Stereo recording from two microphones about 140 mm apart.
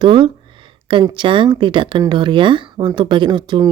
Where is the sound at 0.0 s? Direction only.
35° right (ahead or behind).